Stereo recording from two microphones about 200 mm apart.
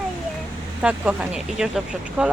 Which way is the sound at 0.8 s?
5° right (ahead or behind).